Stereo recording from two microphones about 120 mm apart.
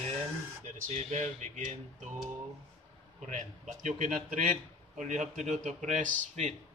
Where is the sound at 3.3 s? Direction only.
90° right.